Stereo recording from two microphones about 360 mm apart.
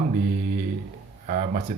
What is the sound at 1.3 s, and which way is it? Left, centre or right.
Speech, right.